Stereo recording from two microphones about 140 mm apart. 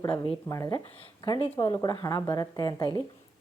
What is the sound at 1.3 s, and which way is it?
A woman's voice, 40° left (ahead or behind).